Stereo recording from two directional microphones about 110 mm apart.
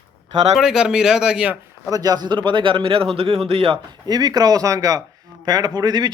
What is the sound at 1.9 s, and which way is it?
Speech, 35° right (ahead or behind).